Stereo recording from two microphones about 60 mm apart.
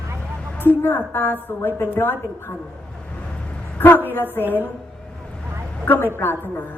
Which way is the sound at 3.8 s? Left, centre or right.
Left.